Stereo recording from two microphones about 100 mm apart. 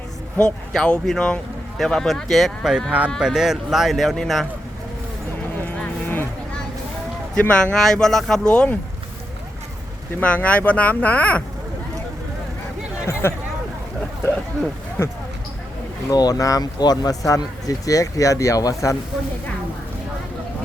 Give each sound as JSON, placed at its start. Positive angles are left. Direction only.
{"t": 0.3, "sound": "speech", "side_deg": 10}
{"t": 5.5, "sound": "vehicle", "side_deg": 15}
{"t": 7.3, "sound": "speech", "side_deg": 10}
{"t": 10.2, "sound": "speech", "side_deg": 15}
{"t": 13.2, "sound": "speech", "side_deg": 25}
{"t": 15.0, "sound": "speech", "side_deg": 25}
{"t": 16.0, "sound": "speech", "side_deg": 40}